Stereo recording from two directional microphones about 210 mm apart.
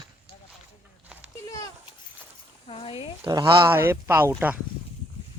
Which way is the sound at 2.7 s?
25° left (ahead or behind).